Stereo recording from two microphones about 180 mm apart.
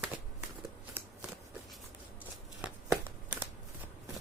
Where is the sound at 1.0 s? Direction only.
10° right (ahead or behind).